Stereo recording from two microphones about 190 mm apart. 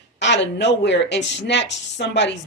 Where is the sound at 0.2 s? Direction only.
65° left (ahead or behind).